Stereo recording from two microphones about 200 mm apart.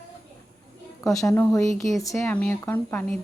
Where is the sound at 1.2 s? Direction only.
5° left (ahead or behind).